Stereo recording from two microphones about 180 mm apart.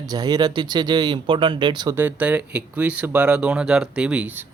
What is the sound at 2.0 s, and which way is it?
Speech, 10° right (ahead or behind).